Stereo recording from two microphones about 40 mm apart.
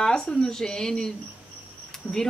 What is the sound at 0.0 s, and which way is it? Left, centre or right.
Speech, centre.